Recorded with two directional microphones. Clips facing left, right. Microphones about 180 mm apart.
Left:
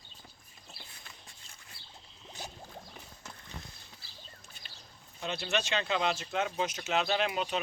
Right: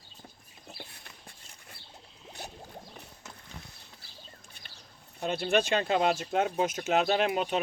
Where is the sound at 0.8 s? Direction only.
55° right (ahead or behind).